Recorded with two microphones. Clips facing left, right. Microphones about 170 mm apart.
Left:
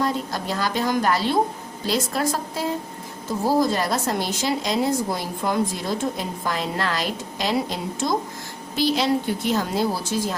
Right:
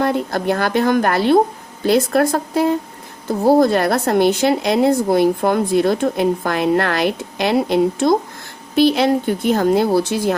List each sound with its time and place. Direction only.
0.0 s a woman's voice: 60° right (ahead or behind)